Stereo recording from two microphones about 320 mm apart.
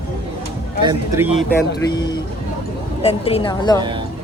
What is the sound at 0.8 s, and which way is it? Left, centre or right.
Speech, centre.